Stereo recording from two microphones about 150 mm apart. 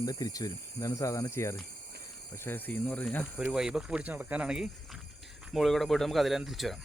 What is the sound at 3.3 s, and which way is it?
Speech, 5° right (ahead or behind).